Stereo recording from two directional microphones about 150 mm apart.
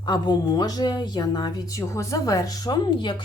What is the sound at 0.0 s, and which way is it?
A woman's voice, 30° left (ahead or behind).